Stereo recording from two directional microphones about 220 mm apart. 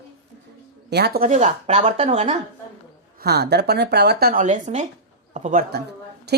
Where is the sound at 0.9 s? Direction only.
45° right (ahead or behind).